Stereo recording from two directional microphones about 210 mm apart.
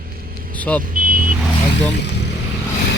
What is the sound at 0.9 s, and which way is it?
Vehicle, 40° right (ahead or behind).